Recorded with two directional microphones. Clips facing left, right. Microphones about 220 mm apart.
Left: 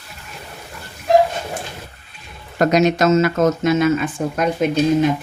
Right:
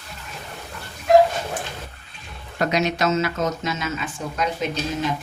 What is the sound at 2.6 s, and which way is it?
Speech, 45° left (ahead or behind).